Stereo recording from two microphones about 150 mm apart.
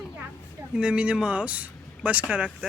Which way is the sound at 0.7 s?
5° right (ahead or behind).